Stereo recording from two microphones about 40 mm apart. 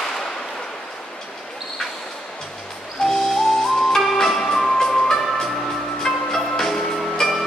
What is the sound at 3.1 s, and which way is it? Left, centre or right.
Music, centre.